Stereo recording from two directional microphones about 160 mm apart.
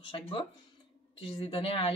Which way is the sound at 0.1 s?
35° left (ahead or behind).